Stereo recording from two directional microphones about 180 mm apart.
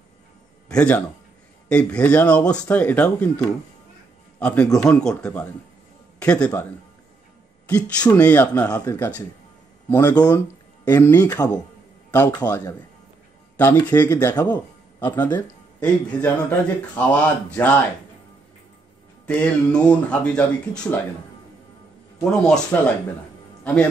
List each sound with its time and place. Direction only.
0.7 s a man's voice: 5° left (ahead or behind)
7.6 s speech: 5° left (ahead or behind)
12.4 s speech: 10° left (ahead or behind)
19.2 s speech: 5° left (ahead or behind)
22.3 s speech: 5° left (ahead or behind)